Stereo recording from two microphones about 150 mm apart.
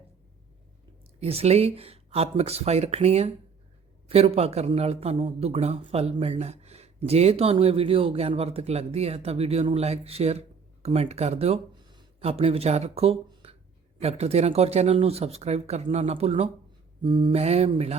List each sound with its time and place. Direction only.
1.2 s a man's voice: 40° right (ahead or behind)
11.7 s a sound: 30° right (ahead or behind)
14.0 s a man's voice: 45° right (ahead or behind)
17.0 s mantra: 30° right (ahead or behind)
17.3 s a man's voice: 45° right (ahead or behind)